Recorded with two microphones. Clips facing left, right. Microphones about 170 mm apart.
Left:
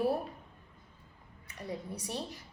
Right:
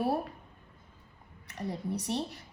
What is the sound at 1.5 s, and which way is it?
Speech, 70° right (ahead or behind).